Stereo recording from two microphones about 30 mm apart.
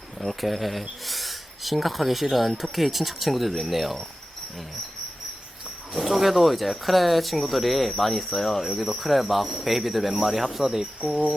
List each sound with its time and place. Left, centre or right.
0.2 s speech: centre
5.9 s speech: centre
8.3 s cricket: centre
8.8 s speech: centre
10.6 s speech: centre